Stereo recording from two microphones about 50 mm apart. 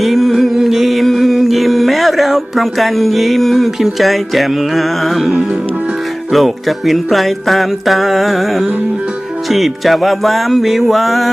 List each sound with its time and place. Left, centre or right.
0.0 s music: centre
5.2 s music: centre
6.3 s music: centre